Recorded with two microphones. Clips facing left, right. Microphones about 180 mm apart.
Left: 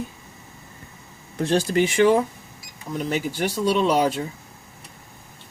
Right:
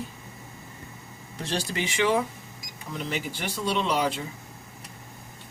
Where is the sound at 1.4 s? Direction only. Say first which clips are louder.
Left 10 dB; 50° left (ahead or behind).